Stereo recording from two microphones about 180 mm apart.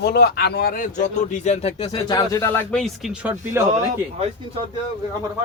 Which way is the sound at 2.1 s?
20° left (ahead or behind).